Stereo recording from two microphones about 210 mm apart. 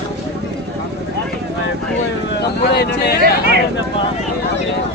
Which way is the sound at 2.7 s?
55° left (ahead or behind).